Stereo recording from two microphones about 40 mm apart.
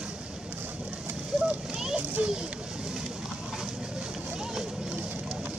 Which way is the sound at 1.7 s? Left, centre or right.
Centre.